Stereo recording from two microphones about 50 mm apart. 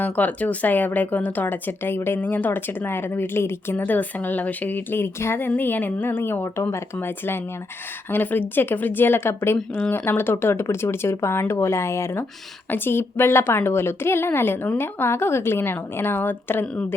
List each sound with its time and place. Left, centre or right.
0.0 s a woman's voice: left
3.8 s a woman's voice: left
8.1 s a woman's voice: left
12.7 s a woman's voice: left